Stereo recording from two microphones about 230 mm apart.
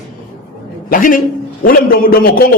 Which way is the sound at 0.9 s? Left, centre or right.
Left.